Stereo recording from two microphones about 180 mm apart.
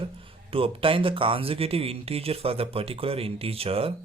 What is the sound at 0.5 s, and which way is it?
Speech, 30° right (ahead or behind).